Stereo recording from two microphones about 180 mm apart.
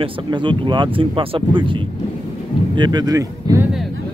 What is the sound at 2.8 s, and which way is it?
Speech, 25° right (ahead or behind).